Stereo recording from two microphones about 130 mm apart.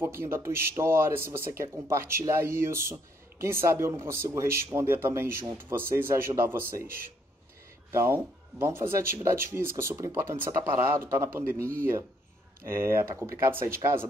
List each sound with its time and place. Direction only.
0.0 s speech: 20° right (ahead or behind)
7.9 s speech: 25° right (ahead or behind)
12.6 s speech: 20° right (ahead or behind)